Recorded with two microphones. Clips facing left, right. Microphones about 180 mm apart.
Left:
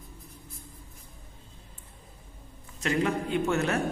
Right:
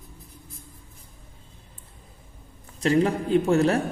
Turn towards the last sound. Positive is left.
turn(degrees=-35)  # may be behind; listen again after turning